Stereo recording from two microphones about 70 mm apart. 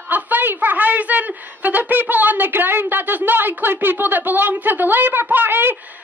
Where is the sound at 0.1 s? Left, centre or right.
Right.